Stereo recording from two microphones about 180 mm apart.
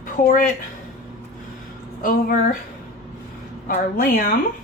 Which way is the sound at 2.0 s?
50° left (ahead or behind).